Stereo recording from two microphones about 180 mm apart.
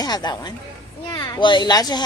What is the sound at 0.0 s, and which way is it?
A woman's voice, 20° left (ahead or behind).